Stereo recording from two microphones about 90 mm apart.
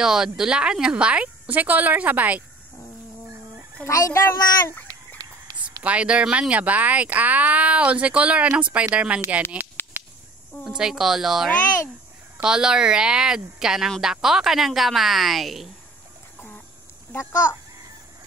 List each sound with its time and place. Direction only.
0.0 s speech: 5° right (ahead or behind)
3.8 s a child's voice: 35° left (ahead or behind)
4.8 s a sound: 45° right (ahead or behind)
5.9 s speech: 15° right (ahead or behind)
9.8 s a sound: 25° left (ahead or behind)
10.8 s speech: 5° right (ahead or behind)
17.1 s a child's voice: 35° left (ahead or behind)